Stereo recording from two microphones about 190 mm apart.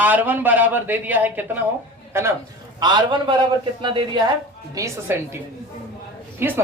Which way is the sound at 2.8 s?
25° right (ahead or behind).